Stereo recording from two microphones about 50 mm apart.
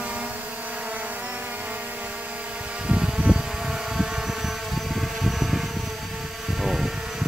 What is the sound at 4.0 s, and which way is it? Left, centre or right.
Vehicle, centre.